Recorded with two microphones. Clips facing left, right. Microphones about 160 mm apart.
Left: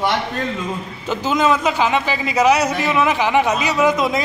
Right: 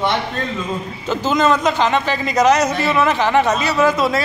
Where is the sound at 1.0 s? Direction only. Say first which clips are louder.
Right 1 dB; 10° left (ahead or behind).